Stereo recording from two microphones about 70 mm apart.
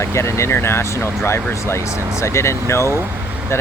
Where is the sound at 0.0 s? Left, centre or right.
Left.